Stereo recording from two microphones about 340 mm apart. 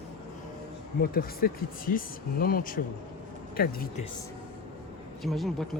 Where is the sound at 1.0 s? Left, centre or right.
Left.